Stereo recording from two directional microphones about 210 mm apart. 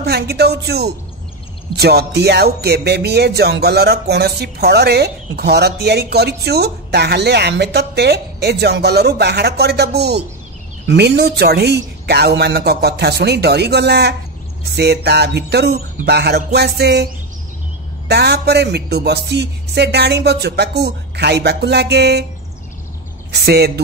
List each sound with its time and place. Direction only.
0.0 s speech: 50° right (ahead or behind)
23.3 s speech: 50° right (ahead or behind)